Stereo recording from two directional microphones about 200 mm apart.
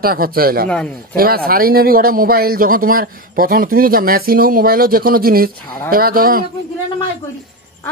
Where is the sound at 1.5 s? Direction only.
45° right (ahead or behind).